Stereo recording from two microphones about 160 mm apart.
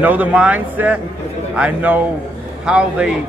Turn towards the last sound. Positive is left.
turn(degrees=-5)  # may be behind; listen again after turning